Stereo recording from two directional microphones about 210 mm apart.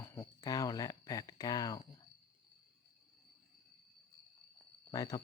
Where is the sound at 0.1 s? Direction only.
15° left (ahead or behind).